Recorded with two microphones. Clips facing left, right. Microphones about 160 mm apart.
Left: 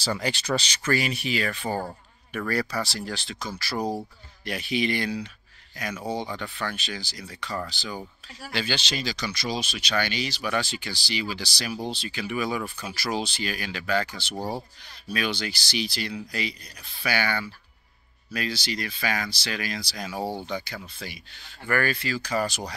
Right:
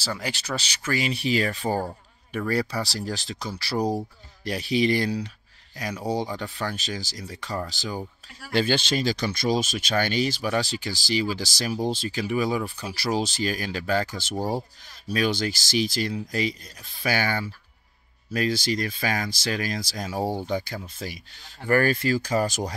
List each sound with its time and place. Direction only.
0.0 s speech: 5° right (ahead or behind)
1.0 s speech: 30° right (ahead or behind)
3.7 s speech: 15° right (ahead or behind)
4.5 s speech: 35° right (ahead or behind)
14.3 s speech: 10° right (ahead or behind)
15.0 s speech: 40° right (ahead or behind)